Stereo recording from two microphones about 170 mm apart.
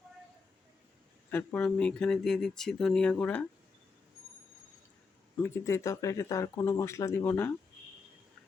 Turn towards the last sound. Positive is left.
turn(degrees=15)  # may be behind; listen again after turning